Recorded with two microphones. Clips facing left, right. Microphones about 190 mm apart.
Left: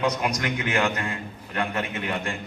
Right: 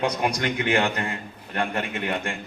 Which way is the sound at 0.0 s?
30° right (ahead or behind).